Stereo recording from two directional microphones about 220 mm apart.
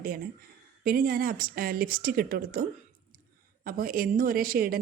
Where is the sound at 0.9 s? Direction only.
40° right (ahead or behind).